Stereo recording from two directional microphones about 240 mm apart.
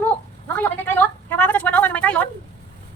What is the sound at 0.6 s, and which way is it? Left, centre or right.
A woman's voice, centre.